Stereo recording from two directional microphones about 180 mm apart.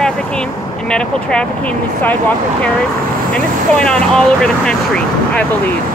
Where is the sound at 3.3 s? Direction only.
5° left (ahead or behind).